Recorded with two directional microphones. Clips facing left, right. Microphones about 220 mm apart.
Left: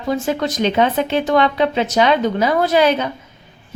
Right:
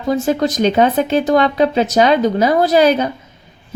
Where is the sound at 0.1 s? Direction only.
40° right (ahead or behind).